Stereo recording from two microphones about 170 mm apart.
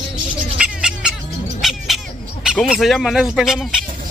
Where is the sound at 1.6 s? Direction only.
Centre (ahead or behind).